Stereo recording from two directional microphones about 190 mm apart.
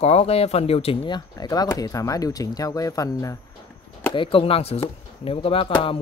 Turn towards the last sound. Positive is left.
turn(degrees=30)  # may be behind; listen again after turning